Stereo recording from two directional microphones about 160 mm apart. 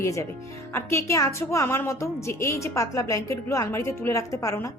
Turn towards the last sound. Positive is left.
turn(degrees=20)  # may be behind; listen again after turning